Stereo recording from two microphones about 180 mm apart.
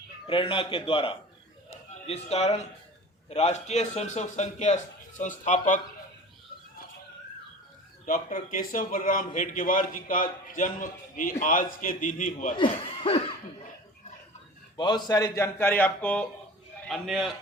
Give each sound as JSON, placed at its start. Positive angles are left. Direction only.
{"t": 0.3, "sound": "a man's voice", "side_deg": 30}
{"t": 8.0, "sound": "a man's voice", "side_deg": 50}
{"t": 12.5, "sound": "cough", "side_deg": 30}
{"t": 14.8, "sound": "a man's voice", "side_deg": 25}